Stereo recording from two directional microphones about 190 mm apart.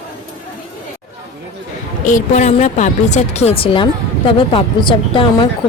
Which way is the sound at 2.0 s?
40° left (ahead or behind).